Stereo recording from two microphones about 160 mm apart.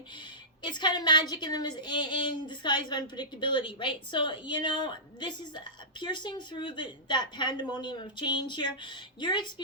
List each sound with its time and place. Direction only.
0.6 s a woman's voice: 30° left (ahead or behind)